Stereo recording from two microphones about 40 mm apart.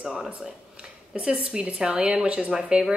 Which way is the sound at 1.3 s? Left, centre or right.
Right.